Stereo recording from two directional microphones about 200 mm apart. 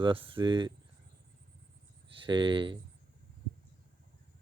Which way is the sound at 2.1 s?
25° right (ahead or behind).